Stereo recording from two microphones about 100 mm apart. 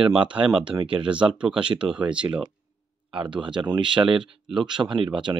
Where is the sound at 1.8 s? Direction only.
10° right (ahead or behind).